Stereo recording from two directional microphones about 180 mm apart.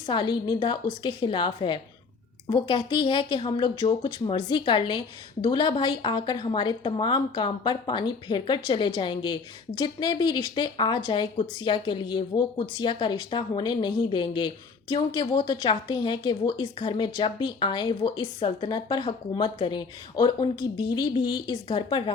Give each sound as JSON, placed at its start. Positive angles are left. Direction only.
{"t": 0.0, "sound": "speech", "side_deg": 25}